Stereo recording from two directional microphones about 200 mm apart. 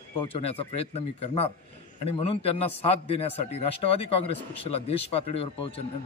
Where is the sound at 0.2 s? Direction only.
30° left (ahead or behind).